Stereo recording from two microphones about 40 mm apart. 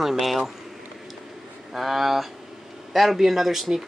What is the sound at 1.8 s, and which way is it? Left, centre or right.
Speech, centre.